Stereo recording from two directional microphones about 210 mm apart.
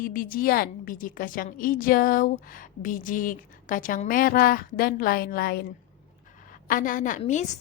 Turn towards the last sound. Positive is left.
turn(degrees=35)  # may be behind; listen again after turning